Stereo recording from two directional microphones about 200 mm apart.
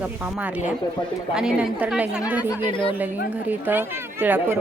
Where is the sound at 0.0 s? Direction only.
5° right (ahead or behind).